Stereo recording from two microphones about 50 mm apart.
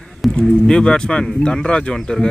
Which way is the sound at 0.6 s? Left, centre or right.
Centre.